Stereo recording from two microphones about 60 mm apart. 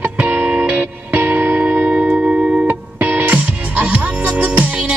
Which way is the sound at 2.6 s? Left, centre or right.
Right.